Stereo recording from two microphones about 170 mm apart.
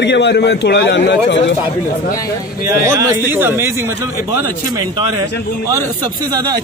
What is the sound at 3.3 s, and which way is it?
A man's voice, 10° right (ahead or behind).